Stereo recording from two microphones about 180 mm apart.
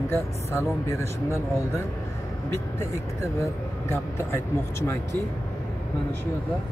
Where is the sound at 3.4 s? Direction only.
15° left (ahead or behind).